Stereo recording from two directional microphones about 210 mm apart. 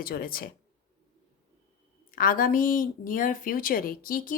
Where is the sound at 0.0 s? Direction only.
45° left (ahead or behind).